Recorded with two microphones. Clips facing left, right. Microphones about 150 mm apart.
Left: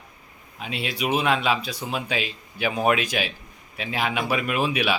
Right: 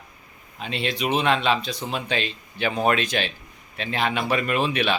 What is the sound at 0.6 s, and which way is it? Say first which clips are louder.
Speech: right 2 dB; 5° left (ahead or behind).